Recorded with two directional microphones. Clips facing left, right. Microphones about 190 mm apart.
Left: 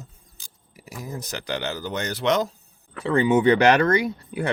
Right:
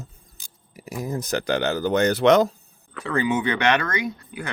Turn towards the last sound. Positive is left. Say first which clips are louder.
# left 3 dB
turn(degrees=35)  # may be behind; listen again after turning